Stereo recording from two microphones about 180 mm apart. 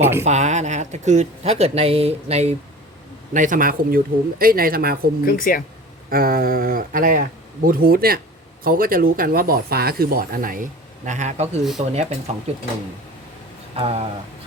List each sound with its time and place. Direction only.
0.0 s speech: 15° right (ahead or behind)
0.3 s speech: 40° right (ahead or behind)
3.3 s speech: 45° right (ahead or behind)
5.2 s speech: 50° left (ahead or behind)
6.1 s speech: 55° right (ahead or behind); by 12.6 s 35° right (ahead or behind)
13.7 s speech: 30° right (ahead or behind)